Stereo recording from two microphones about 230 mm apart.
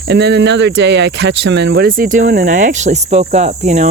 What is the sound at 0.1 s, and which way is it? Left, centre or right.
Speech, right.